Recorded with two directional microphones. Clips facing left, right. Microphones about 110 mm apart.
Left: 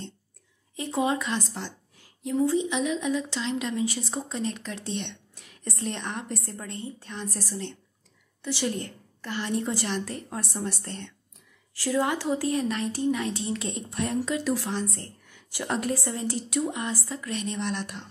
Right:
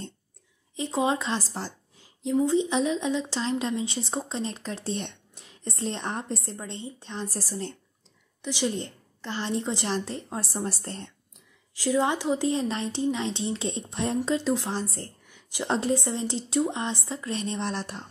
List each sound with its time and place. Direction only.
0.7 s a woman's voice: 20° right (ahead or behind)
2.0 s a woman's voice: 20° right (ahead or behind); by 5.1 s 40° right (ahead or behind)
5.3 s a woman's voice: 25° right (ahead or behind)
8.4 s a woman's voice: 15° right (ahead or behind); by 11.1 s 35° right (ahead or behind)
11.7 s a woman's voice: 20° right (ahead or behind); by 15.0 s 35° right (ahead or behind)
15.2 s a woman's voice: 20° right (ahead or behind); by 18.0 s 35° right (ahead or behind)